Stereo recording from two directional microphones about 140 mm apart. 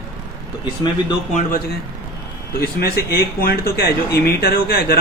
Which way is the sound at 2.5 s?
90° left.